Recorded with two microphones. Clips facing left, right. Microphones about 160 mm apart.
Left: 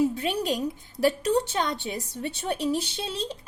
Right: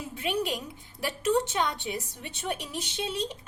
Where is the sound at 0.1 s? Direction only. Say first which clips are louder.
Left 3 dB; 40° left (ahead or behind).